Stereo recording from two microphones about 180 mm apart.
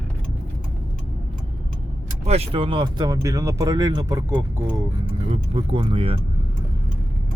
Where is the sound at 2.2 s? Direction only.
35° right (ahead or behind).